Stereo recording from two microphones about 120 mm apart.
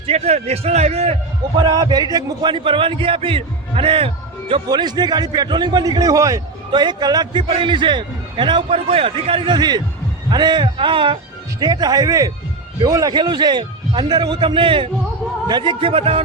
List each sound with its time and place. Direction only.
0.0 s a man's voice: 60° right (ahead or behind)
1.5 s a man's voice: 35° right (ahead or behind)
6.7 s a man's voice: 40° right (ahead or behind)
7.4 s a man's voice: 45° right (ahead or behind)
11.6 s a man's voice: 35° right (ahead or behind); by 16.2 s 50° right (ahead or behind)